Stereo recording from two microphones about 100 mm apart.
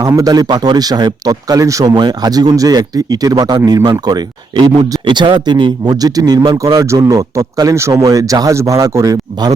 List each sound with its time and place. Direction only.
0.0 s speech: 35° right (ahead or behind)
6.8 s speech: 30° right (ahead or behind)